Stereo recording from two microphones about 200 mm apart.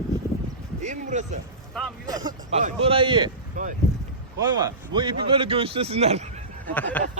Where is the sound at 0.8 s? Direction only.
35° right (ahead or behind).